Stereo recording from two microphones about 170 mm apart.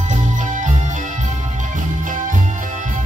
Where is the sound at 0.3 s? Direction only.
45° right (ahead or behind).